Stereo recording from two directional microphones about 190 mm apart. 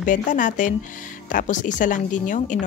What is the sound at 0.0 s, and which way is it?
A woman's voice, 45° left (ahead or behind).